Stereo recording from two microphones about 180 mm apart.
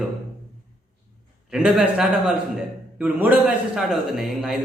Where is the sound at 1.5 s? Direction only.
5° right (ahead or behind).